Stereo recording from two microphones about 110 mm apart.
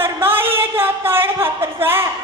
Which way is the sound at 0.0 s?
20° right (ahead or behind).